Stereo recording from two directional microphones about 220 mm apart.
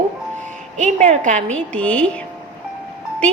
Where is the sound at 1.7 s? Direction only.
5° left (ahead or behind).